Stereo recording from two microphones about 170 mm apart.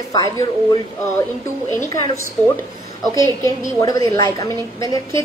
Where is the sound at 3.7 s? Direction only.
20° left (ahead or behind).